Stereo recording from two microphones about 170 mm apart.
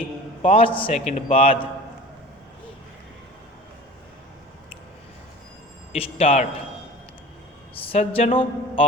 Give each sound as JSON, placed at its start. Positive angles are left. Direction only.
{"t": 0.0, "sound": "a man's voice", "side_deg": 35}
{"t": 5.9, "sound": "a man's voice", "side_deg": 35}
{"t": 7.8, "sound": "a sound", "side_deg": 35}